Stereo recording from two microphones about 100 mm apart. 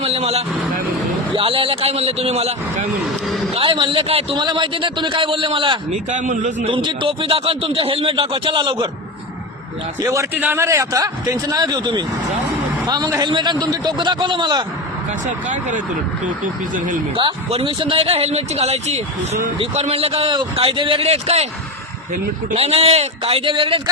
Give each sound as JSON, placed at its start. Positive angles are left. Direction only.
{"t": 0.0, "sound": "speech", "side_deg": -90}
{"t": 1.3, "sound": "speech", "side_deg": -65}
{"t": 3.2, "sound": "a sound", "side_deg": 0}
{"t": 3.5, "sound": "a man's voice", "side_deg": -60}
{"t": 4.4, "sound": "a man's voice", "side_deg": -50}
{"t": 10.0, "sound": "a man's voice", "side_deg": -30}
{"t": 17.5, "sound": "a man's voice", "side_deg": -65}
{"t": 22.5, "sound": "speech", "side_deg": -90}